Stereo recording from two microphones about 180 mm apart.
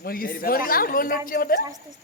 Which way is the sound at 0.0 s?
55° left (ahead or behind).